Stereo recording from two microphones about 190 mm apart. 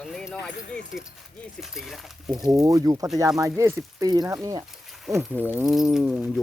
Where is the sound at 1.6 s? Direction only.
Centre (ahead or behind).